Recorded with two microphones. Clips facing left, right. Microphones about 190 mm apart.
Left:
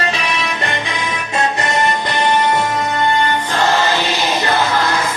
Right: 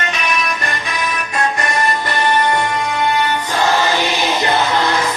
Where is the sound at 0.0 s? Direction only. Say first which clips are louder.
Left 1 dB; 30° left (ahead or behind).